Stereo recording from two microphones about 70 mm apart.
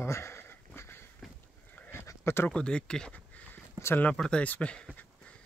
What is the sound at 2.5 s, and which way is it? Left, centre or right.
Speech, centre.